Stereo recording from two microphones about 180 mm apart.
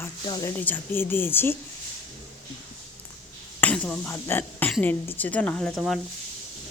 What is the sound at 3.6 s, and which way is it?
Speech, 5° left (ahead or behind).